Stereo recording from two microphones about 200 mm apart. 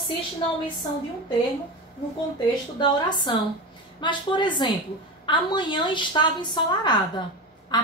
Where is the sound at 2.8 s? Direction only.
20° left (ahead or behind).